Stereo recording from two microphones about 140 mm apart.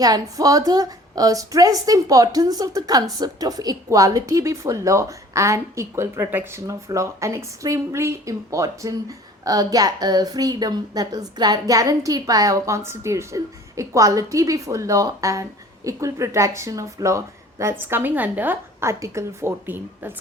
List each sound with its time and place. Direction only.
0.0 s a woman's voice: 25° right (ahead or behind)